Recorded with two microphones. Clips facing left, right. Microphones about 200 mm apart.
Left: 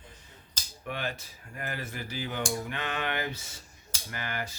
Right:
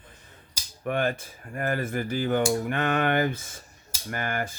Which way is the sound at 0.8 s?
50° right (ahead or behind).